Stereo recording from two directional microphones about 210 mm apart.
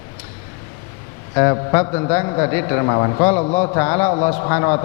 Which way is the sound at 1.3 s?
15° left (ahead or behind).